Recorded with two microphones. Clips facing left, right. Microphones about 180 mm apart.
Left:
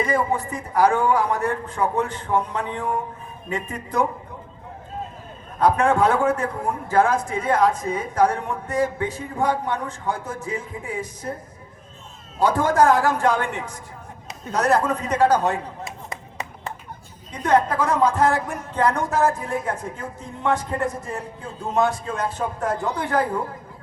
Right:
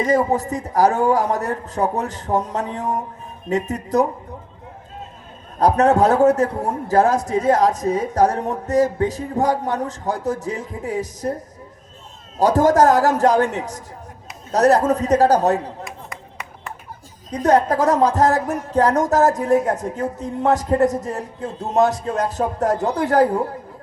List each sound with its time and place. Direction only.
0.0 s speech: 40° right (ahead or behind)
5.5 s speech: 40° right (ahead or behind)
12.4 s speech: 40° right (ahead or behind)
16.0 s a sound: 25° left (ahead or behind)
17.3 s speech: 40° right (ahead or behind)